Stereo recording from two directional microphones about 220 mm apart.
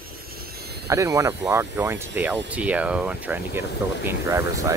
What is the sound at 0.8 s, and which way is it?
Speech, 15° right (ahead or behind).